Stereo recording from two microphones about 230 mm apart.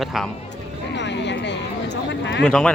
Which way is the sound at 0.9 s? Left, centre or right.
Left.